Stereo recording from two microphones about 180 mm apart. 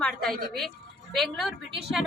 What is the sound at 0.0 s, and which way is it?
A woman's voice, centre (ahead or behind).